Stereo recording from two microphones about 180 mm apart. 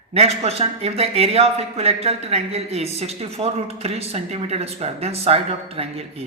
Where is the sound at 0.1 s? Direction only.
35° right (ahead or behind).